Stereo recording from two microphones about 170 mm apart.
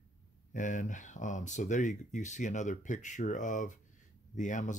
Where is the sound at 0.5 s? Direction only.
50° left (ahead or behind).